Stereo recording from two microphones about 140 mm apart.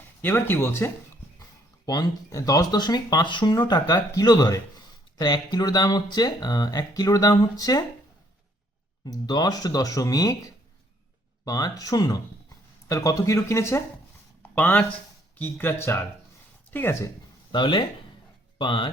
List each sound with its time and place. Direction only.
0.2 s speech: 15° left (ahead or behind)
1.9 s speech: 25° left (ahead or behind)
9.0 s speech: 30° left (ahead or behind)
11.4 s speech: 25° left (ahead or behind)
17.5 s speech: 35° left (ahead or behind)